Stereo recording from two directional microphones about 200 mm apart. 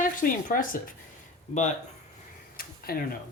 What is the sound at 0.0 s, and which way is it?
Speech, 40° left (ahead or behind).